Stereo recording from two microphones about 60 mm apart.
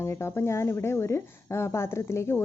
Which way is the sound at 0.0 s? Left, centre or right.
Left.